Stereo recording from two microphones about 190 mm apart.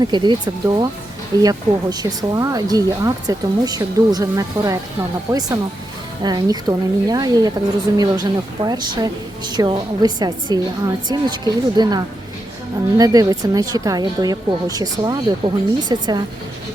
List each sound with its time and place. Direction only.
0.0 s a woman's voice: 25° right (ahead or behind)